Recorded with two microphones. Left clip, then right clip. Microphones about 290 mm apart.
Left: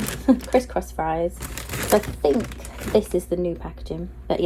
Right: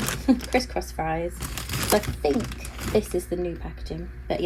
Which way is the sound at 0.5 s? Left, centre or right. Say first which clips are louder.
Left 4 dB; left.